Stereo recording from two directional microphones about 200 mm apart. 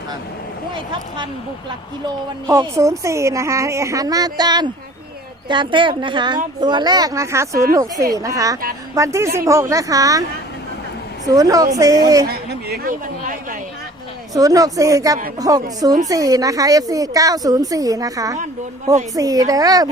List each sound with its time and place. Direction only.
2.5 s a woman's voice: 15° right (ahead or behind)
11.3 s a woman's voice: 15° right (ahead or behind)
12.3 s a woman's voice: 55° right (ahead or behind)
14.3 s a woman's voice: 15° right (ahead or behind)